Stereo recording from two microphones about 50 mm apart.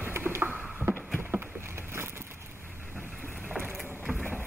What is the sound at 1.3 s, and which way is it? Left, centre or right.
Boat, right.